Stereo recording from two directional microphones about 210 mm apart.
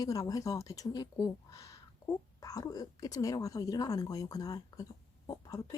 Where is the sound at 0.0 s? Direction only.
15° left (ahead or behind).